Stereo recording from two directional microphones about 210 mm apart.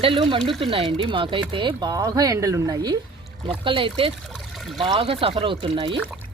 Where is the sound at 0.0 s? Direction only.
25° right (ahead or behind).